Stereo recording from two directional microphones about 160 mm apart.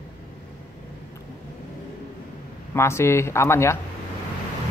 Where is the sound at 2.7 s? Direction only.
15° left (ahead or behind).